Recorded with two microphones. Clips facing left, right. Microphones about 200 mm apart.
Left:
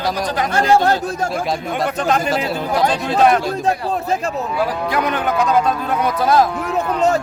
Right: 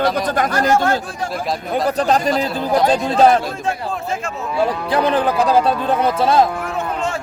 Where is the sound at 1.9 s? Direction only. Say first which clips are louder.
Right 3 dB; 35° right (ahead or behind).